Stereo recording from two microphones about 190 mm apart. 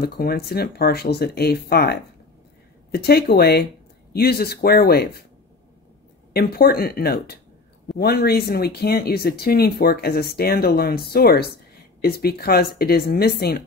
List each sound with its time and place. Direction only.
0.0 s speech: 55° left (ahead or behind)
6.3 s speech: 55° left (ahead or behind)